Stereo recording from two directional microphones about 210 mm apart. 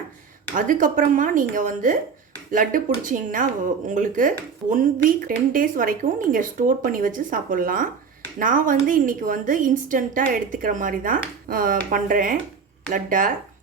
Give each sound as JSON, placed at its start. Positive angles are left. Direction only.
{"t": 0.5, "sound": "speech", "side_deg": -40}